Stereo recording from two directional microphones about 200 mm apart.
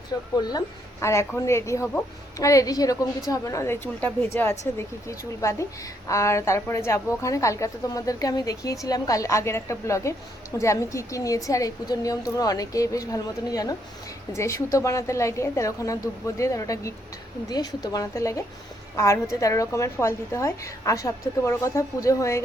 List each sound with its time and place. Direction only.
0.3 s a woman's voice: 20° left (ahead or behind)